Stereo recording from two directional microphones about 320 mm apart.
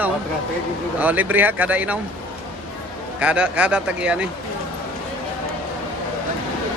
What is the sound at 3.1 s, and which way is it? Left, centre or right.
A man's voice, centre.